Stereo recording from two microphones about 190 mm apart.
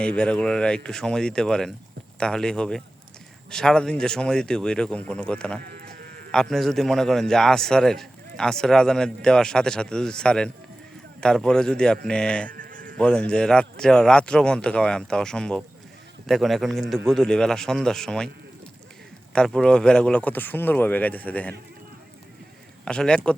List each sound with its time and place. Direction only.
0.0 s a man's voice: 5° left (ahead or behind)
5.6 s sheep: 55° right (ahead or behind)
6.3 s a man's voice: centre (ahead or behind)
12.5 s sheep: 45° right (ahead or behind)
13.0 s a man's voice: 5° left (ahead or behind)
19.3 s speech: 5° left (ahead or behind)
22.9 s a man's voice: 5° left (ahead or behind)